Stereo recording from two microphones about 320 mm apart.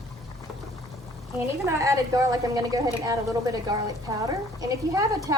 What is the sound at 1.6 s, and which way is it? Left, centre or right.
A woman's voice, centre.